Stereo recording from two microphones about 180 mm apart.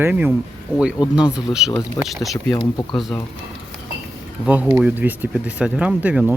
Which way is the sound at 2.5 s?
25° left (ahead or behind).